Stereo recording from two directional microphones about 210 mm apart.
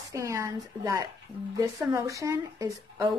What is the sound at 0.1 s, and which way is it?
A woman's voice, 15° right (ahead or behind).